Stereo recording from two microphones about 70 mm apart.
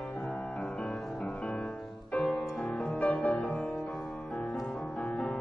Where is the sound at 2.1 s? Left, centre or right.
Centre.